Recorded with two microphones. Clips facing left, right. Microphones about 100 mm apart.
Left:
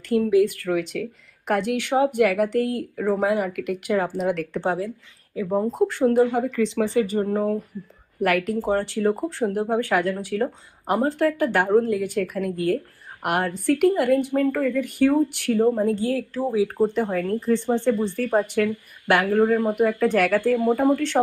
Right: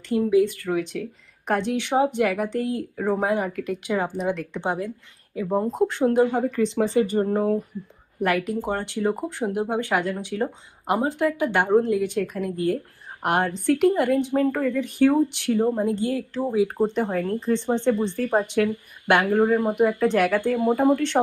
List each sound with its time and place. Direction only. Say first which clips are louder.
0.1 s speech: left 1 dB; 20° right (ahead or behind)
5.3 s speech: left 1 dB; 5° right (ahead or behind)
5.6 s speech: left 2 dB; 20° right (ahead or behind)